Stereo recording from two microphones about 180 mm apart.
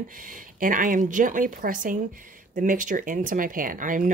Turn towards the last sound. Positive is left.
turn(degrees=-45)  # may be behind; listen again after turning